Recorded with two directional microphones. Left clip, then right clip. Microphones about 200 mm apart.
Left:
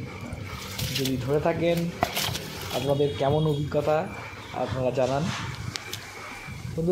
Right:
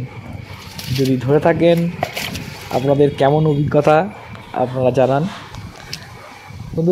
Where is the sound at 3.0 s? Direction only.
45° right (ahead or behind).